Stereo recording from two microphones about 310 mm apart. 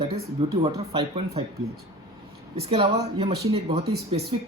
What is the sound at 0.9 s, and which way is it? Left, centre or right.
Speech, centre.